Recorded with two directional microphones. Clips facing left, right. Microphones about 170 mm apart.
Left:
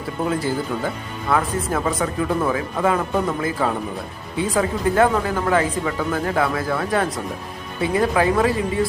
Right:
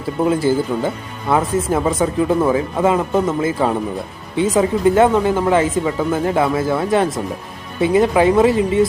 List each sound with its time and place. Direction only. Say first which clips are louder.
0.3 s speech: right 7 dB; 25° right (ahead or behind)